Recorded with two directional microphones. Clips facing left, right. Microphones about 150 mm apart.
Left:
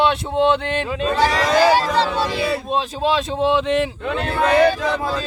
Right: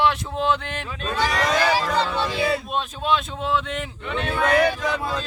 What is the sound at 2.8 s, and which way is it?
Speech, 90° left.